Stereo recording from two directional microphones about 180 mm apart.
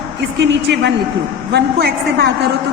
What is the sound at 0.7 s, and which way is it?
A woman's voice, 70° right (ahead or behind).